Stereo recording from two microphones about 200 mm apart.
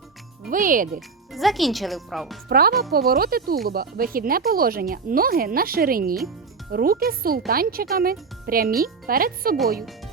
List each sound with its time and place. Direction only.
0.5 s speech: 40° right (ahead or behind)
0.9 s speech: centre (ahead or behind)
2.5 s speech: 50° right (ahead or behind)